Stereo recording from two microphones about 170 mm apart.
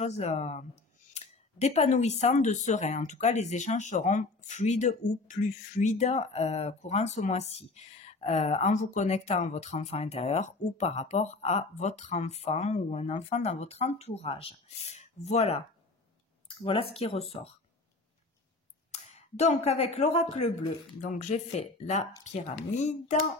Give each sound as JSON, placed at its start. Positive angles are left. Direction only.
{"t": 0.0, "sound": "speech", "side_deg": 40}
{"t": 18.9, "sound": "speech", "side_deg": 40}